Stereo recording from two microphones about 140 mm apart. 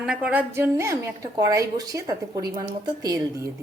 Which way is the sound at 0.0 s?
5° right (ahead or behind).